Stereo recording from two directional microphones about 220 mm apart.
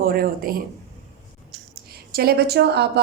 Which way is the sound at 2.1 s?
45° right (ahead or behind).